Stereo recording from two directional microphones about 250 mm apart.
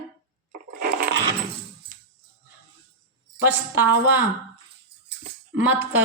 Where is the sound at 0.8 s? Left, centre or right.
Right.